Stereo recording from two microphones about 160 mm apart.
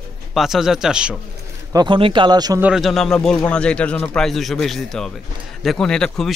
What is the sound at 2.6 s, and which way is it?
Speech, centre (ahead or behind).